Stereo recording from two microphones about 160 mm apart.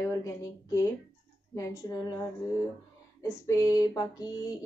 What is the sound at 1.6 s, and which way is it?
Speech, 25° left (ahead or behind).